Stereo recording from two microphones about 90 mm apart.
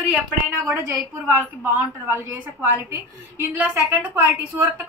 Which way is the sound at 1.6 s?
20° right (ahead or behind).